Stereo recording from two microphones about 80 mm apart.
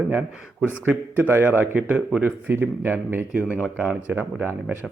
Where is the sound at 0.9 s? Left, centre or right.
Right.